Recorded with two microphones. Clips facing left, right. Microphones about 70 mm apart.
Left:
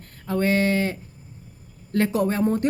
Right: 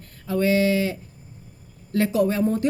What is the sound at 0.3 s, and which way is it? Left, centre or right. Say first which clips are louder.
Speech: right 1 dB; left.